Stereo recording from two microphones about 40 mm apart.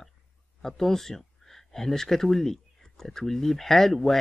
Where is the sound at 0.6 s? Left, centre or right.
Centre.